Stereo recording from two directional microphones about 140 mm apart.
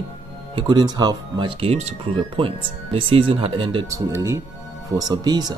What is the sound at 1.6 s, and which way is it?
Speech, 50° right (ahead or behind).